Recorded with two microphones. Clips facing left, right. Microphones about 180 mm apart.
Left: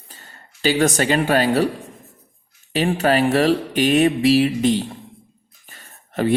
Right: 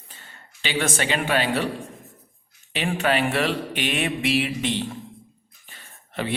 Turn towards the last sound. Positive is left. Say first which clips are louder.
# left 8 dB
turn(degrees=45)  # may be behind; listen again after turning